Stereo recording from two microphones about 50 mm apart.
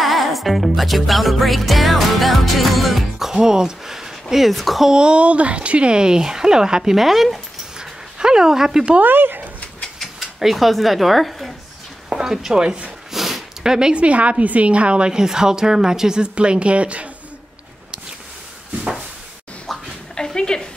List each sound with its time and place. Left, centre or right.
0.0 s music: centre
4.8 s speech: centre
9.0 s speech: right
9.9 s mechanisms: centre
12.1 s speech: centre
13.1 s a sound: centre
14.0 s a woman's voice: right
19.7 s bathtub: centre
20.2 s a sound: centre